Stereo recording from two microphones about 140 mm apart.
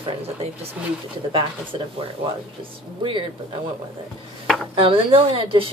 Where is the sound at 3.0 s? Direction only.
35° right (ahead or behind).